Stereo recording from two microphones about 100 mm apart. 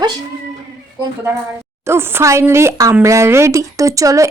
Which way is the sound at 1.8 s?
25° right (ahead or behind).